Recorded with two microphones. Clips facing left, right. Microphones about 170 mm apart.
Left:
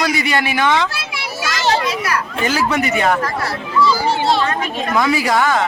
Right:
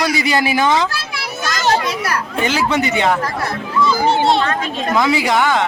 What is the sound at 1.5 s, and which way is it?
Children playing, 45° right (ahead or behind).